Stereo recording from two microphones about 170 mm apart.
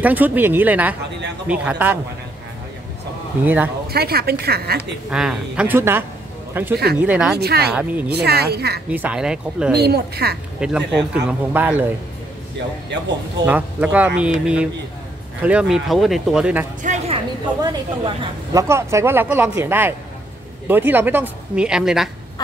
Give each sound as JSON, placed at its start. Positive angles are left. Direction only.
{"t": 0.0, "sound": "speech", "side_deg": -10}
{"t": 3.4, "sound": "speech", "side_deg": -10}
{"t": 3.9, "sound": "speech", "side_deg": -65}
{"t": 5.1, "sound": "speech", "side_deg": -5}
{"t": 7.3, "sound": "speech", "side_deg": -70}
{"t": 8.9, "sound": "a man's voice", "side_deg": -10}
{"t": 9.8, "sound": "speech", "side_deg": -70}
{"t": 10.6, "sound": "a man's voice", "side_deg": -5}
{"t": 13.5, "sound": "a man's voice", "side_deg": -10}
{"t": 16.8, "sound": "a sound", "side_deg": -40}
{"t": 17.6, "sound": "speech", "side_deg": -25}